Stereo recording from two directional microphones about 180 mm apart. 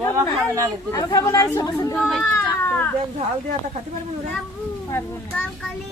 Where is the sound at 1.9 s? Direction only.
10° left (ahead or behind).